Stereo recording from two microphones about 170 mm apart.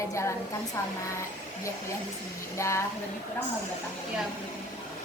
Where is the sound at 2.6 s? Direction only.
15° left (ahead or behind).